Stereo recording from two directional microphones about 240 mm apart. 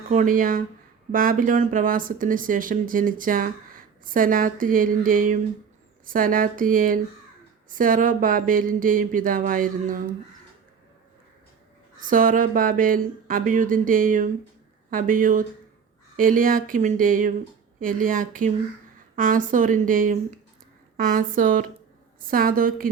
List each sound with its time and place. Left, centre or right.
0.1 s speech: right
12.0 s speech: right